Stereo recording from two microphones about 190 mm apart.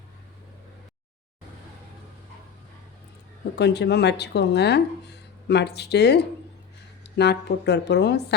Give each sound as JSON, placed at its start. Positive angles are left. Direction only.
{"t": 3.5, "sound": "speech", "side_deg": 60}